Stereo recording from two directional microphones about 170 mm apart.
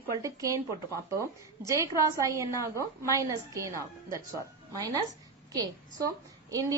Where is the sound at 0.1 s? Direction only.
20° right (ahead or behind).